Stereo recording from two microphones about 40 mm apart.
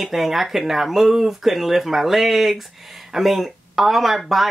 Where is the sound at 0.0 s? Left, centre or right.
Centre.